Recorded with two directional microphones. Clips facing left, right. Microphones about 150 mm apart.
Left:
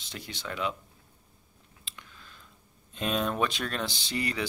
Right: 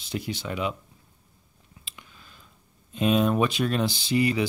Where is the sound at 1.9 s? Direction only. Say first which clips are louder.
Even; 5° right (ahead or behind).